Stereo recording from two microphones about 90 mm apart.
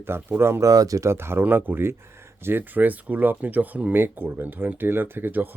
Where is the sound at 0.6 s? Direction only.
40° right (ahead or behind); by 5.5 s 20° right (ahead or behind).